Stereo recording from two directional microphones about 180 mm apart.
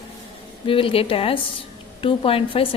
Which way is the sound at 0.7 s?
30° left (ahead or behind).